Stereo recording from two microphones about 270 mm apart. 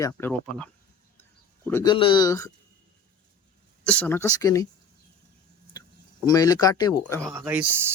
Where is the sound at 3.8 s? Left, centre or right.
Centre.